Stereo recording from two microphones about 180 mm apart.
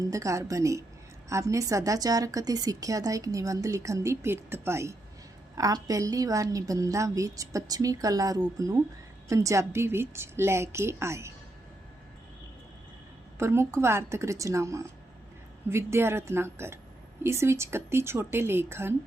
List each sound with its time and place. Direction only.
0.1 s a woman's voice: 15° right (ahead or behind)
13.4 s a woman's voice: 15° right (ahead or behind)